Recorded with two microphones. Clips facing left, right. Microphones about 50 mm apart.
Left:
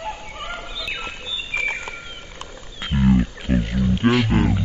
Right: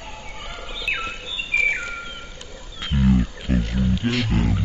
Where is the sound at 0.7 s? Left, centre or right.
Right.